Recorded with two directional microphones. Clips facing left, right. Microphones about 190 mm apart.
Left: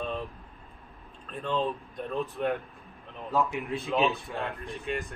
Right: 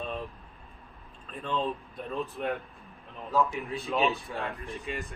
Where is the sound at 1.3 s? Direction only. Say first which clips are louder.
Left 2 dB; centre (ahead or behind).